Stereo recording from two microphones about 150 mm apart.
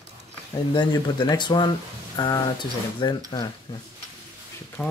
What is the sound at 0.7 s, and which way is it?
Speech, 30° left (ahead or behind).